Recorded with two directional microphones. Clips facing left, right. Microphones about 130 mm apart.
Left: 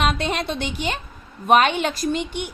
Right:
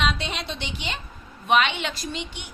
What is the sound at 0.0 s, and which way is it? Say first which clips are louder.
A woman's voice: left 5 dB; 50° left (ahead or behind).